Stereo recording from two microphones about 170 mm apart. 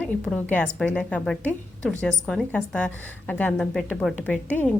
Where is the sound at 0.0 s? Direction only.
10° left (ahead or behind).